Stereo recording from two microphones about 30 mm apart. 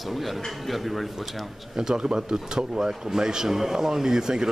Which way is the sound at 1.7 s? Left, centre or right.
Centre.